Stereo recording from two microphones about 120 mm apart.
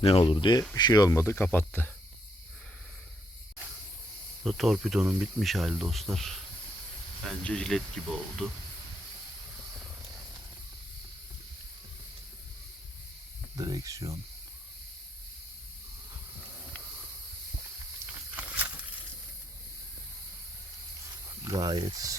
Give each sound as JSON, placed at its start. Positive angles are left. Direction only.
{"t": 0.0, "sound": "speech", "side_deg": 50}
{"t": 4.4, "sound": "speech", "side_deg": 0}
{"t": 7.4, "sound": "speech", "side_deg": 5}
{"t": 13.6, "sound": "speech", "side_deg": -30}
{"t": 18.3, "sound": "a sound", "side_deg": -10}
{"t": 21.4, "sound": "speech", "side_deg": -35}